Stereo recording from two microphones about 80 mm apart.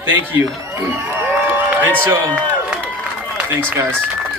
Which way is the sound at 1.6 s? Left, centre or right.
Right.